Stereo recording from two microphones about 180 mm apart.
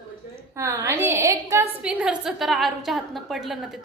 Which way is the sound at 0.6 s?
15° right (ahead or behind).